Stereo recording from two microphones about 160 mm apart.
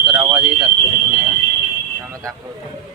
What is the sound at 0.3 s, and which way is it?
Speech, 5° right (ahead or behind).